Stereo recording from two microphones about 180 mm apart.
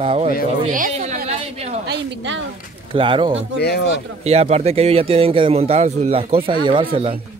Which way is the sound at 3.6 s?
65° left (ahead or behind).